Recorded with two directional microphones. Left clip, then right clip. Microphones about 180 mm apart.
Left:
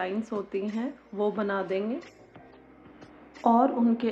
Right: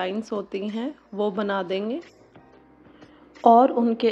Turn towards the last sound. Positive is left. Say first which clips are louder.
# right 5 dB
turn(degrees=-40)  # may be behind; listen again after turning